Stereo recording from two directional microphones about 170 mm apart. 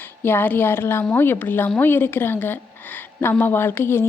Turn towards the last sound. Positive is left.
turn(degrees=15)  # may be behind; listen again after turning